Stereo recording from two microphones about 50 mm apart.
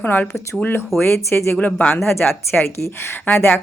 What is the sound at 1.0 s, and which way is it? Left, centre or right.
Speech, left.